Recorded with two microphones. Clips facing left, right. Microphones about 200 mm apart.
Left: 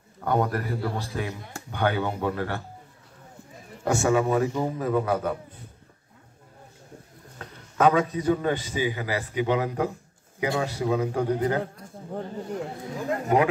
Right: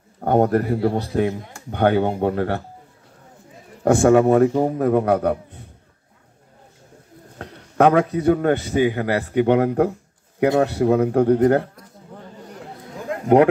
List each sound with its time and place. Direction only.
0.2 s a man's voice: 50° right (ahead or behind)
3.8 s a man's voice: 55° right (ahead or behind)
7.3 s a man's voice: 65° right (ahead or behind)
13.3 s a man's voice: 60° right (ahead or behind)